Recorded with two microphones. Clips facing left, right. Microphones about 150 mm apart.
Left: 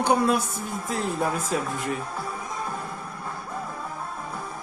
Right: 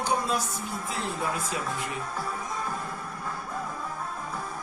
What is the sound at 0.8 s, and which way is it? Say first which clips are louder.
Speech: left 6 dB; 45° left (ahead or behind).